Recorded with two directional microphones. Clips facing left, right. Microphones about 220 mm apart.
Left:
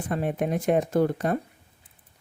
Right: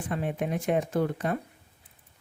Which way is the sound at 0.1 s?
45° left (ahead or behind).